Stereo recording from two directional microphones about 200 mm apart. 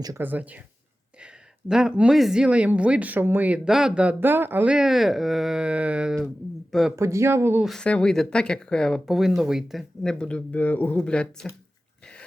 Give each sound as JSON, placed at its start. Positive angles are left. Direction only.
{"t": 0.0, "sound": "speech", "side_deg": -10}
{"t": 6.9, "sound": "speech", "side_deg": -15}
{"t": 7.7, "sound": "speech", "side_deg": 5}